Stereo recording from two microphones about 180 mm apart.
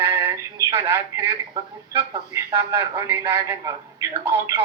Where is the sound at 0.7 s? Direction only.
15° right (ahead or behind).